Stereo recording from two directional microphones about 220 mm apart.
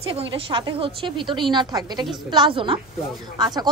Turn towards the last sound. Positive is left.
turn(degrees=-20)  # may be behind; listen again after turning